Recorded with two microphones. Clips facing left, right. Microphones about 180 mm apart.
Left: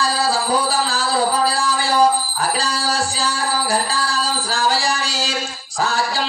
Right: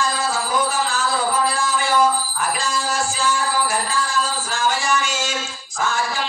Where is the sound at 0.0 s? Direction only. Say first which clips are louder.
Left 3 dB; 35° left (ahead or behind).